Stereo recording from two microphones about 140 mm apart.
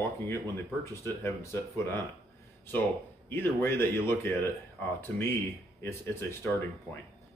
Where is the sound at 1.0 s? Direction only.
20° left (ahead or behind).